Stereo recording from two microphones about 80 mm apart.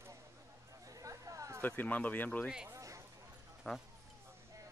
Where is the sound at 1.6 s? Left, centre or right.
Left.